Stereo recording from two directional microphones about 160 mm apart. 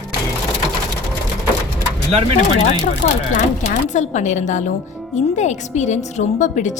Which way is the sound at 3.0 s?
50° left (ahead or behind).